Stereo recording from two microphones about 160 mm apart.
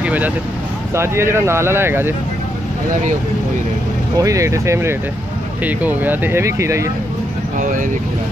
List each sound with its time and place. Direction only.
0.0 s vehicle: 10° right (ahead or behind)
0.9 s speech: 15° right (ahead or behind)
4.2 s speech: 20° right (ahead or behind)
7.5 s speech: 60° right (ahead or behind)